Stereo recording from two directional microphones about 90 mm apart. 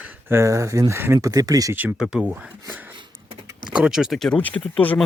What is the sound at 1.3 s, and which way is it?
Speech, 45° right (ahead or behind).